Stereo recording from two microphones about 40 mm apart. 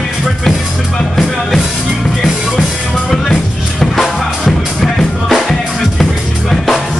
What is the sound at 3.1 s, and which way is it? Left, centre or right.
Music, centre.